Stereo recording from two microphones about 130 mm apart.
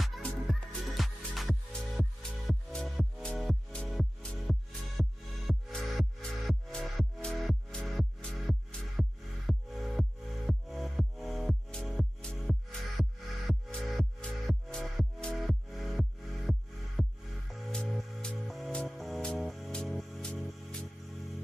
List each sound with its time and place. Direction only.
0.0 s music: centre (ahead or behind)